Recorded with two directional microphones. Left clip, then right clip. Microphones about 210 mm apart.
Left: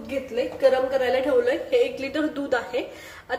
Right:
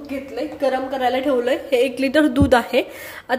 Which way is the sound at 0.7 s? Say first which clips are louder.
Even; 35° right (ahead or behind).